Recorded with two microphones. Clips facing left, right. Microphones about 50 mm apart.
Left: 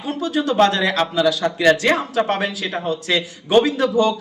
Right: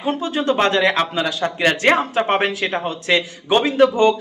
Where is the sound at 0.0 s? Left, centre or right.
Right.